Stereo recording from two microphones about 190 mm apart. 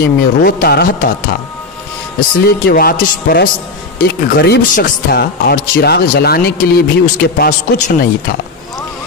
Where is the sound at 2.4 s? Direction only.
55° left (ahead or behind).